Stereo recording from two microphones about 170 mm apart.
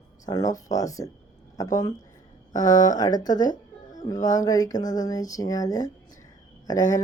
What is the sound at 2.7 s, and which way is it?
Speech, 50° left (ahead or behind).